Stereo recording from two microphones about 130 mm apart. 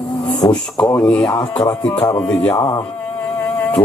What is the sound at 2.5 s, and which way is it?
Speech, 25° left (ahead or behind).